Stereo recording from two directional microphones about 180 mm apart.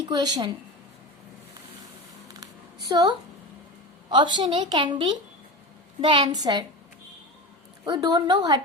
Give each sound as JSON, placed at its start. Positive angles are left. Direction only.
{"t": 0.0, "sound": "a woman's voice", "side_deg": -20}
{"t": 2.9, "sound": "a woman's voice", "side_deg": -20}
{"t": 7.9, "sound": "a woman's voice", "side_deg": -20}